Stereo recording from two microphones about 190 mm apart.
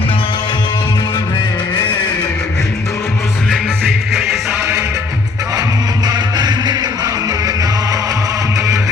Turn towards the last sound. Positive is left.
turn(degrees=-20)  # may be behind; listen again after turning